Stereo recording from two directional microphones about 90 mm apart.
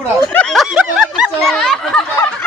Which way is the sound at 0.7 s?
5° right (ahead or behind).